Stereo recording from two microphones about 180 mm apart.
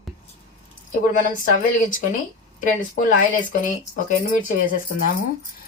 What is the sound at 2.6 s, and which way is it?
A woman's voice, 45° left (ahead or behind).